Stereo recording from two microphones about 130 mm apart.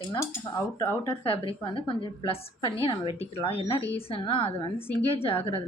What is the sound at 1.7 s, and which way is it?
A woman's voice, 40° left (ahead or behind).